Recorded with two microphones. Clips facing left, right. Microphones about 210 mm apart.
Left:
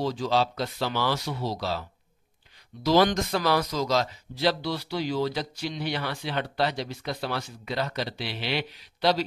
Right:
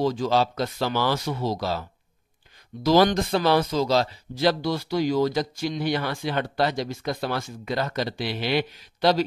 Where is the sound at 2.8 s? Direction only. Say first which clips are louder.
Right 3 dB; 40° right (ahead or behind).